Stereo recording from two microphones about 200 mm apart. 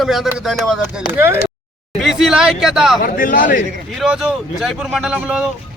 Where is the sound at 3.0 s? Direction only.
45° left (ahead or behind).